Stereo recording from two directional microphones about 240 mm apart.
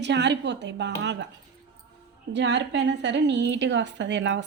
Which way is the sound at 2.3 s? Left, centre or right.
Right.